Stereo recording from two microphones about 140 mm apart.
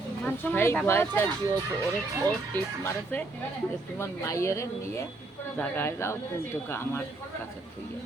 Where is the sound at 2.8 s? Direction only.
15° left (ahead or behind).